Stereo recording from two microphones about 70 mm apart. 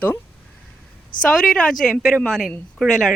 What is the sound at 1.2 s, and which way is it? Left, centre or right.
A woman's voice, centre.